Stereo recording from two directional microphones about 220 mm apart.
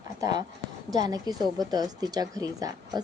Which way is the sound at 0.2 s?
15° right (ahead or behind).